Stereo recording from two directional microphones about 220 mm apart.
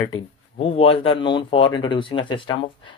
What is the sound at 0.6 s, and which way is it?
Speech, 25° left (ahead or behind).